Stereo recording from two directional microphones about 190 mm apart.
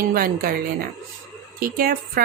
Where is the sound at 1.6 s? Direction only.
50° right (ahead or behind).